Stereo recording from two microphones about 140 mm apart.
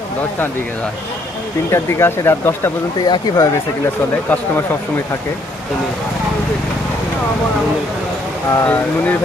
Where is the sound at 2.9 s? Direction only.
30° left (ahead or behind).